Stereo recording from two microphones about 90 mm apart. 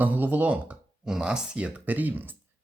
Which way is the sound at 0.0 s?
20° right (ahead or behind).